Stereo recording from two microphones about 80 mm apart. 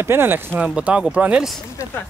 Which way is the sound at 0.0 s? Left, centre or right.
Right.